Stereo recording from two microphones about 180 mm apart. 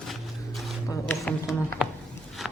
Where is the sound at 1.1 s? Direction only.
Centre (ahead or behind).